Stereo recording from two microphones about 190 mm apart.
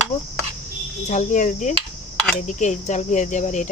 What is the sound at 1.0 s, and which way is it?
Speech, 40° left (ahead or behind).